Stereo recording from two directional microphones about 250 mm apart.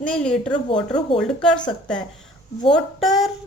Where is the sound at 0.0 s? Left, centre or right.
Centre.